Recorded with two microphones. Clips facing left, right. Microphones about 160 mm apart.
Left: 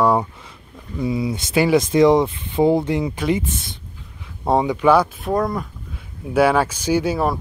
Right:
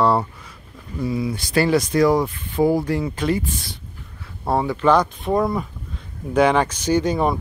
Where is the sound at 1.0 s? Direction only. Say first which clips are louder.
Left 1 dB; 25° left (ahead or behind).